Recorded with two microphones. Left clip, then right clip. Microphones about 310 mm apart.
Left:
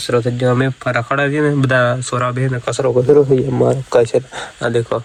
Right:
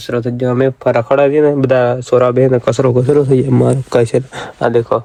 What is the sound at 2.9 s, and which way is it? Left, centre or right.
Speech, right.